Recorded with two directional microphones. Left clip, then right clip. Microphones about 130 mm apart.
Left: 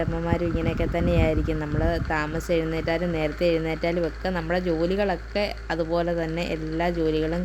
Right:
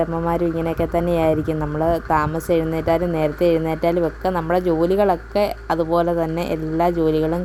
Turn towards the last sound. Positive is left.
turn(degrees=-35)  # may be behind; listen again after turning